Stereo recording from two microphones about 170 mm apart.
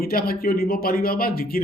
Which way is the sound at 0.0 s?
60° left (ahead or behind).